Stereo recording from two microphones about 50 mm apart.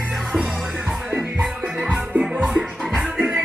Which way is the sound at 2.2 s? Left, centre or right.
Centre.